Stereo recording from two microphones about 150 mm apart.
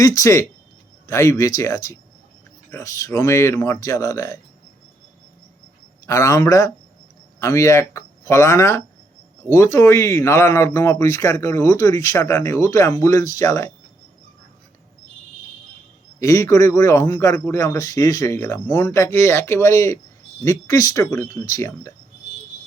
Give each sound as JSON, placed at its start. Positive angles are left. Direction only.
{"t": 0.0, "sound": "speech", "side_deg": 20}
{"t": 6.1, "sound": "speech", "side_deg": 20}
{"t": 16.2, "sound": "speech", "side_deg": 20}